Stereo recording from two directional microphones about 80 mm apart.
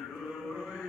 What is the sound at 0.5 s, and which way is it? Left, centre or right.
Chant, centre.